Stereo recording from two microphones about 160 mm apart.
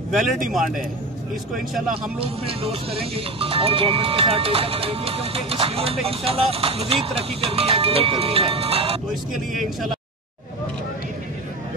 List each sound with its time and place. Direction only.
0.1 s speech: centre (ahead or behind)
2.1 s speech: 35° right (ahead or behind)
9.1 s speech: centre (ahead or behind)